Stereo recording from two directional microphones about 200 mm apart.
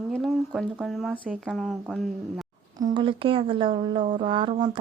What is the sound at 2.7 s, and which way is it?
Speech, 20° right (ahead or behind).